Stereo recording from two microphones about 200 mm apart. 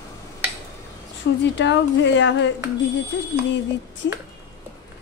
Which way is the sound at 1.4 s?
65° left (ahead or behind).